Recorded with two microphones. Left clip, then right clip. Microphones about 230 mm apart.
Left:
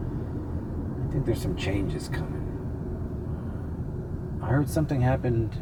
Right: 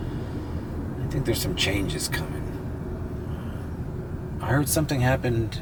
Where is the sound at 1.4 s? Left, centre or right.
Centre.